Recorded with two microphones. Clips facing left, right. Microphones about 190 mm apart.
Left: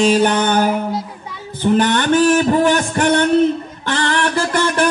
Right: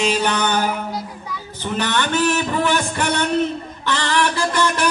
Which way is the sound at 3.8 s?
50° left (ahead or behind).